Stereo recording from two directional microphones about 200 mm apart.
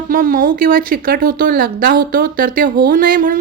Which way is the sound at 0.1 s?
45° right (ahead or behind).